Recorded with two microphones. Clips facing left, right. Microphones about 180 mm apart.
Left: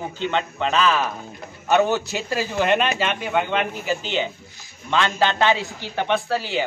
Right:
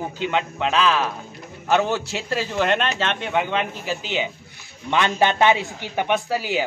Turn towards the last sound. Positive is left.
turn(degrees=-10)  # may be behind; listen again after turning